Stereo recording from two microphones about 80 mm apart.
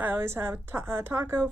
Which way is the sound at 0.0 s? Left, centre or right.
Right.